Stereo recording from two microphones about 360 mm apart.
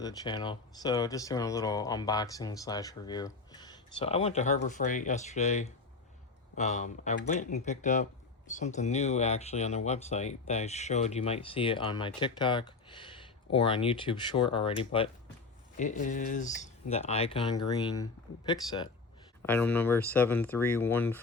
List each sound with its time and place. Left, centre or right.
0.0 s speech: centre